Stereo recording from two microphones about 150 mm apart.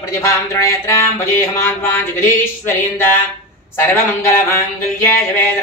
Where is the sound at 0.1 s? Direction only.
20° left (ahead or behind).